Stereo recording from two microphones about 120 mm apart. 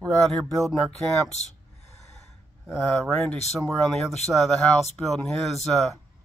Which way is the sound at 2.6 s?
Centre (ahead or behind).